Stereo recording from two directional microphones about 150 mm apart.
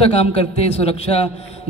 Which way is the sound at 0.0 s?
40° left (ahead or behind).